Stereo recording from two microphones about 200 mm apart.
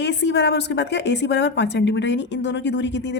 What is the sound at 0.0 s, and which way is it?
A woman's voice, 60° left (ahead or behind).